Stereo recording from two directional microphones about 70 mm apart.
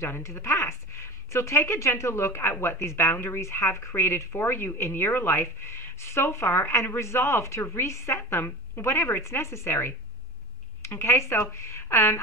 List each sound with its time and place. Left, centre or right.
0.0 s speech: left